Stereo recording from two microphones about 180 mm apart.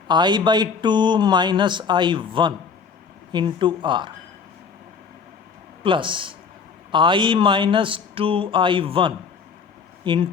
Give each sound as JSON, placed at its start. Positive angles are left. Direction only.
{"t": 0.1, "sound": "speech", "side_deg": -25}
{"t": 5.8, "sound": "speech", "side_deg": -25}